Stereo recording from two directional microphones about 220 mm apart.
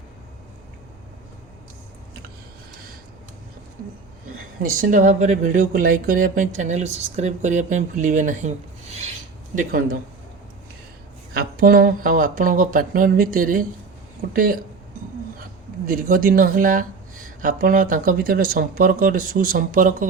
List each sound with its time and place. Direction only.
4.6 s speech: 35° right (ahead or behind)
11.3 s speech: 40° right (ahead or behind)
15.9 s speech: 40° right (ahead or behind)